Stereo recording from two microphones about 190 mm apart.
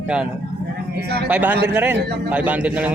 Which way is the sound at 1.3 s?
10° right (ahead or behind).